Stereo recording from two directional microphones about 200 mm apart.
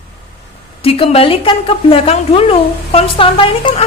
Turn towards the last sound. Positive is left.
turn(degrees=25)  # may be behind; listen again after turning